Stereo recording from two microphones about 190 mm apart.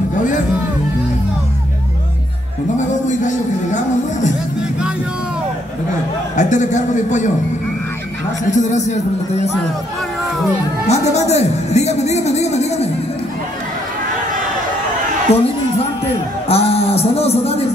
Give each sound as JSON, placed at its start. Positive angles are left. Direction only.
{"t": 2.8, "sound": "music", "side_deg": 40}
{"t": 6.3, "sound": "speech", "side_deg": 40}
{"t": 8.5, "sound": "speech", "side_deg": 40}
{"t": 10.9, "sound": "speech", "side_deg": 35}
{"t": 15.3, "sound": "a man's voice", "side_deg": 35}